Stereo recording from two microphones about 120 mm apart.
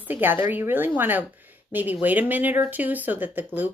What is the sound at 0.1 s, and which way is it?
Speech, 15° right (ahead or behind).